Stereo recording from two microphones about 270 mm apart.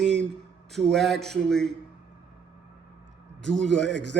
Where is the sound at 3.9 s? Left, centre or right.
Right.